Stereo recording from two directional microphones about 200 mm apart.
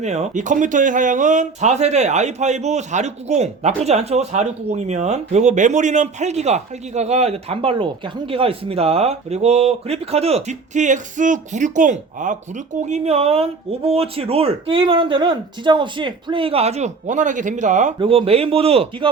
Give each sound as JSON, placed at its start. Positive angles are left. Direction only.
{"t": 0.0, "sound": "speech", "side_deg": -35}